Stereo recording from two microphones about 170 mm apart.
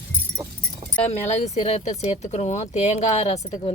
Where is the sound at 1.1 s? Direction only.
40° left (ahead or behind).